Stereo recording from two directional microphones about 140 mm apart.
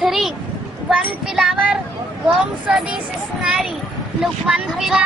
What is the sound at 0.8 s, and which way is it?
Child singing, 5° right (ahead or behind).